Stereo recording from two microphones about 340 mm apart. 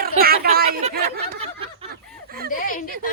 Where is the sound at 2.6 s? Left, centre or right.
Left.